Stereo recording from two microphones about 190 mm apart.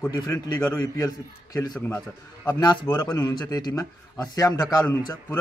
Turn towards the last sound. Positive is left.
turn(degrees=20)  # may be behind; listen again after turning